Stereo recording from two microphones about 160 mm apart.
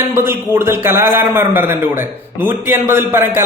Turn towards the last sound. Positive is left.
turn(degrees=-15)  # may be behind; listen again after turning